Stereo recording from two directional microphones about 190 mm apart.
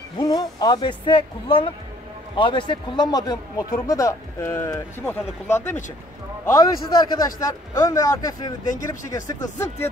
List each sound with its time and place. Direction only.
0.2 s a man's voice: 20° left (ahead or behind)